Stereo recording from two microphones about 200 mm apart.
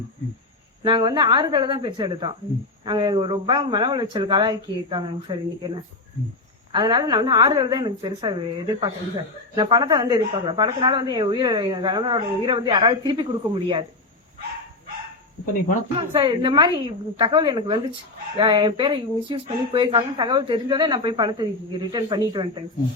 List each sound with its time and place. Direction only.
0.9 s a woman's voice: 20° right (ahead or behind)
16.0 s a woman's voice: 25° right (ahead or behind)